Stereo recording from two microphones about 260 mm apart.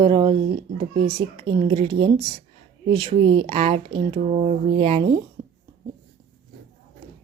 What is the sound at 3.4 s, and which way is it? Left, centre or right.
Speech, right.